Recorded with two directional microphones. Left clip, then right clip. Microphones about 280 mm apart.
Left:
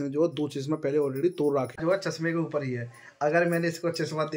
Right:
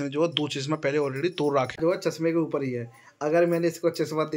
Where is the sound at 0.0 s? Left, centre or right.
Centre.